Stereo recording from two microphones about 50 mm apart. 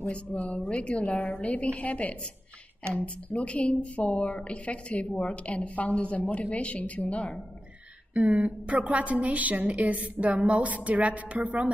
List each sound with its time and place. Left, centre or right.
0.0 s a woman's voice: left
8.1 s a woman's voice: right